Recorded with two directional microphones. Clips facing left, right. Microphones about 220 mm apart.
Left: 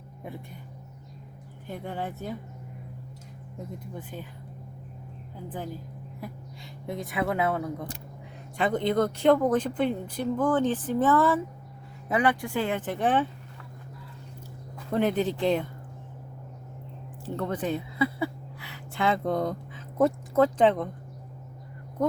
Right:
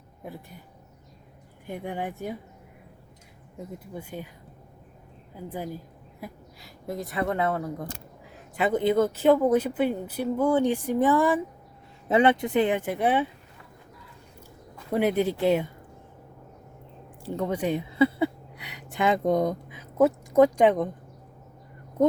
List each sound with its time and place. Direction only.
1.6 s speech: 15° right (ahead or behind)
3.9 s speech: 10° right (ahead or behind)
6.8 s speech: centre (ahead or behind)
12.0 s speech: 25° right (ahead or behind); by 13.2 s 10° right (ahead or behind)
14.9 s speech: 10° right (ahead or behind)
17.2 s speech: 15° right (ahead or behind)
17.9 s a sound: 25° right (ahead or behind); by 20.1 s 10° right (ahead or behind)
20.3 s speech: 15° right (ahead or behind)